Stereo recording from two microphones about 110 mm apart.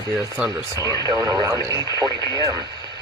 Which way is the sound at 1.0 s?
30° right (ahead or behind).